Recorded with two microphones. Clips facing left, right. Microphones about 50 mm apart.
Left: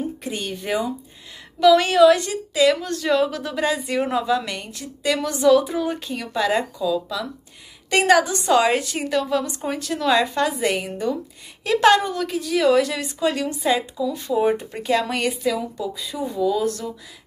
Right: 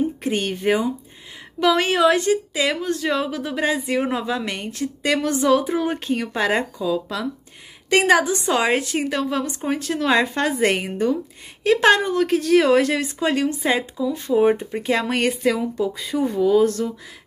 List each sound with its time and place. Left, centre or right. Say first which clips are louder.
0.2 s speech: right 6 dB; right
8.0 s speech: left 2 dB; right
12.4 s a woman's voice: right 6 dB; right
12.6 s speech: right 1 dB; right